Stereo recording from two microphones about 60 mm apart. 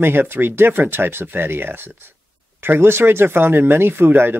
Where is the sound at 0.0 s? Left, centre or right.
Right.